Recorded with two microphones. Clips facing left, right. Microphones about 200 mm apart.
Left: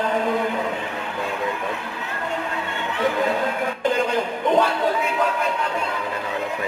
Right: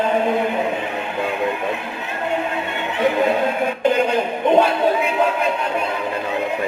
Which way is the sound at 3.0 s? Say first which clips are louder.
Right 4 dB; 20° right (ahead or behind).